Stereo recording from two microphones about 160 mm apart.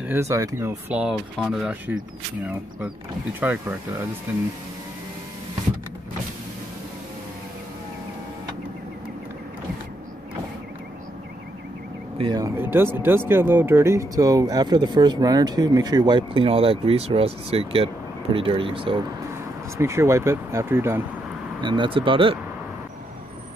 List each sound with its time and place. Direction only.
0.0 s speech: 15° right (ahead or behind)
3.3 s speech: 10° right (ahead or behind)
12.2 s speech: 30° right (ahead or behind)
12.5 s speech: 15° right (ahead or behind); by 18.9 s 35° right (ahead or behind)
19.8 s speech: 15° right (ahead or behind)
21.5 s speech: 30° right (ahead or behind)